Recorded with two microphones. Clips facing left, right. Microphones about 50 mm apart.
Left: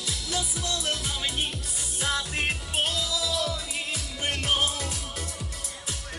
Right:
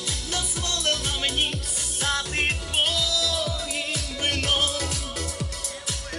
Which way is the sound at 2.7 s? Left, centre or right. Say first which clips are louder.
Right 3 dB; right.